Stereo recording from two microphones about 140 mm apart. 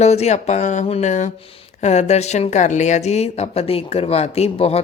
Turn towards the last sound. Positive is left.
turn(degrees=45)  # may be behind; listen again after turning